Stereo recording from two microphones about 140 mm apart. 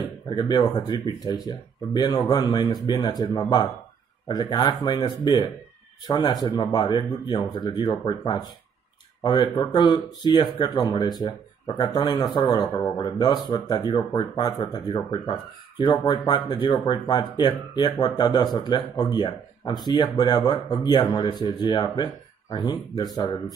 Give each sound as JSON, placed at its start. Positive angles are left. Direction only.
{"t": 0.3, "sound": "speech", "side_deg": 30}
{"t": 16.0, "sound": "speech", "side_deg": 30}